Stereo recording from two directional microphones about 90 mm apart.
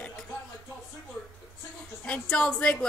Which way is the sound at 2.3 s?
5° left (ahead or behind).